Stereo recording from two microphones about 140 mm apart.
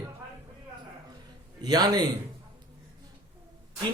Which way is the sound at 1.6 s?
30° right (ahead or behind).